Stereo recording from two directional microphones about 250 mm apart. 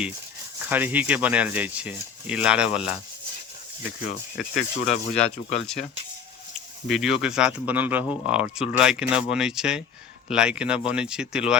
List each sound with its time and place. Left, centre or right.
0.7 s speech: centre
4.4 s speech: left
6.8 s speech: centre